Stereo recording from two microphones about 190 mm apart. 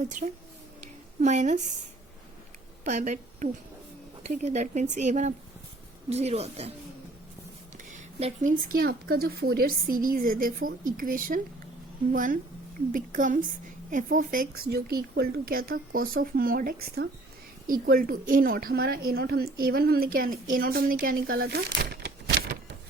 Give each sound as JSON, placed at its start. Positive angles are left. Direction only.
{"t": 1.2, "sound": "speech", "side_deg": -40}
{"t": 2.8, "sound": "a woman's voice", "side_deg": -40}
{"t": 8.2, "sound": "a woman's voice", "side_deg": -40}